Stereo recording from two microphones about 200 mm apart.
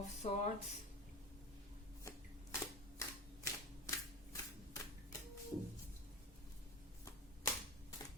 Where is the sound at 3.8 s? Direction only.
15° left (ahead or behind).